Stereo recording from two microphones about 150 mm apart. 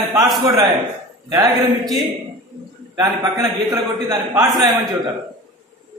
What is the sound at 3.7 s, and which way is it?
Speech, 20° right (ahead or behind).